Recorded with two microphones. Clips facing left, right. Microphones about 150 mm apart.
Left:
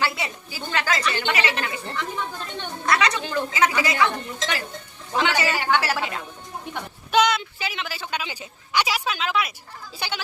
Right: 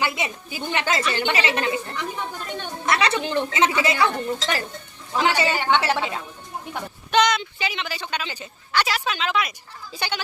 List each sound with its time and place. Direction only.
0.0 s speech: 20° right (ahead or behind)
7.1 s speech: 5° left (ahead or behind)